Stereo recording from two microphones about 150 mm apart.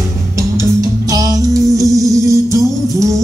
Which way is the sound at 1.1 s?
25° right (ahead or behind).